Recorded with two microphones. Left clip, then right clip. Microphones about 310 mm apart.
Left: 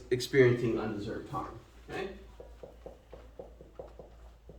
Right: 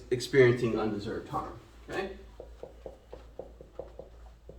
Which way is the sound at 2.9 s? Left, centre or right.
Centre.